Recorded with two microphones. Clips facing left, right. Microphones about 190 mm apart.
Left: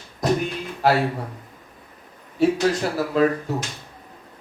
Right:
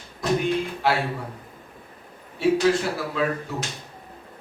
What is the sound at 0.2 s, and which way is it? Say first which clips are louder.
Music: left 2 dB; 40° left (ahead or behind).